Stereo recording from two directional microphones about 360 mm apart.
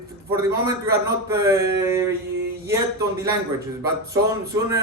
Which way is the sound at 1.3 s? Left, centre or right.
Centre.